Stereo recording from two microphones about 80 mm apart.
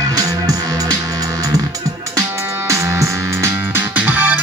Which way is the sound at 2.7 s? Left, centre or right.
Right.